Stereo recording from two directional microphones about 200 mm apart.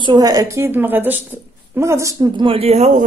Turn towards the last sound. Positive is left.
turn(degrees=-35)  # may be behind; listen again after turning